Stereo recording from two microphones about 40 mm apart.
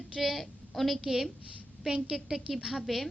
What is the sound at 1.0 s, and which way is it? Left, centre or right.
A woman's voice, centre.